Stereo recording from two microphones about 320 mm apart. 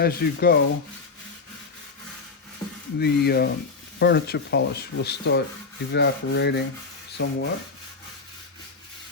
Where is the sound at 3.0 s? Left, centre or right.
Left.